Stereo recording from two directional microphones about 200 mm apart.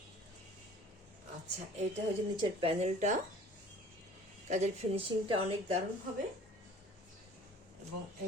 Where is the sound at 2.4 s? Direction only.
30° right (ahead or behind).